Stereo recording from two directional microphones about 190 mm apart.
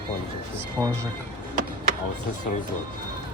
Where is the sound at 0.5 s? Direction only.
15° right (ahead or behind).